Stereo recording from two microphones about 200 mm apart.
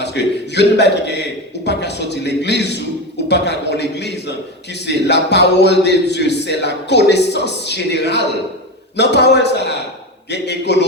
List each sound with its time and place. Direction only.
0.0 s a man's voice: 60° left (ahead or behind)